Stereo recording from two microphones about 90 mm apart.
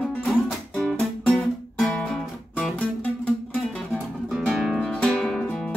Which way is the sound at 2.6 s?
15° left (ahead or behind).